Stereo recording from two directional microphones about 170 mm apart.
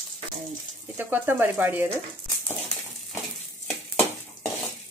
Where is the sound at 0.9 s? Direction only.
10° right (ahead or behind).